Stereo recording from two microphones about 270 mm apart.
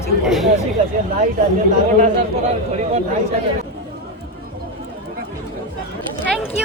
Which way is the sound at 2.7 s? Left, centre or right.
Right.